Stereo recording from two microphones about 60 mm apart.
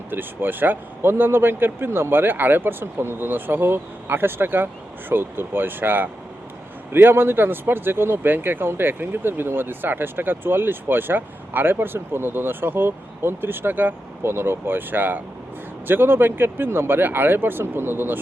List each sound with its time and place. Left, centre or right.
0.1 s speech: right